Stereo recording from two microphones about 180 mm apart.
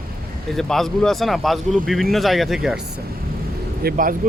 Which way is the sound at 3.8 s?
55° right (ahead or behind).